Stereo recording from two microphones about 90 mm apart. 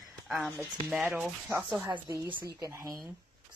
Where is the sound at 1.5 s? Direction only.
25° right (ahead or behind).